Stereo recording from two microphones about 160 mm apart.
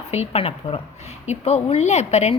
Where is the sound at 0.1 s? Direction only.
40° left (ahead or behind).